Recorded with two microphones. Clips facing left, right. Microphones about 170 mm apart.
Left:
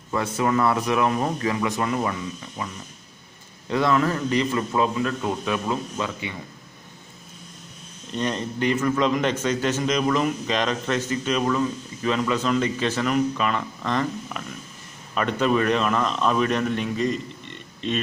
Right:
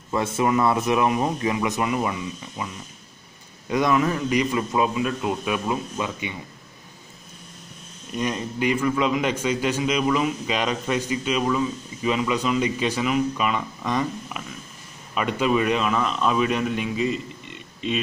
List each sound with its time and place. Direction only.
0.1 s a man's voice: 25° right (ahead or behind)
8.1 s a man's voice: 10° right (ahead or behind)